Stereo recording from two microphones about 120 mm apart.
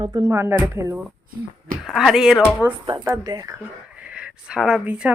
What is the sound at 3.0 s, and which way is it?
Speech, 30° right (ahead or behind).